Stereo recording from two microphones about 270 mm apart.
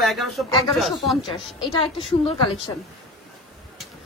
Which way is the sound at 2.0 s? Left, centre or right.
Left.